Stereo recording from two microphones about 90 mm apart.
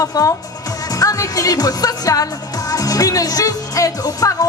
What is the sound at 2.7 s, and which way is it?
Speech, 45° left (ahead or behind).